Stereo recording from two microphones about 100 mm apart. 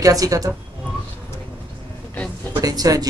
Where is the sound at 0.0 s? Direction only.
35° right (ahead or behind).